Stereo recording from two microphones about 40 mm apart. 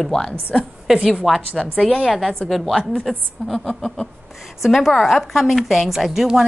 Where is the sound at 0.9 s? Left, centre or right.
Centre.